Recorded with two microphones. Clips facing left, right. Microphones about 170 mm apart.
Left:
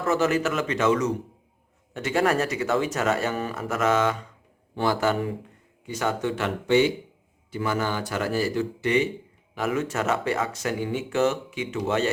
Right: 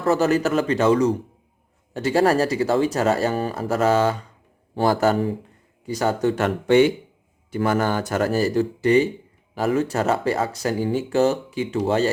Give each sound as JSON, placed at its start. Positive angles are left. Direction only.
{"t": 0.0, "sound": "speech", "side_deg": -35}